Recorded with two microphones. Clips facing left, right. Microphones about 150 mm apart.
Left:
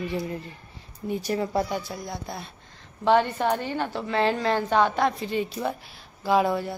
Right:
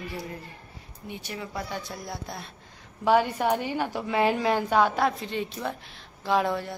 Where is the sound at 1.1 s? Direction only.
40° left (ahead or behind).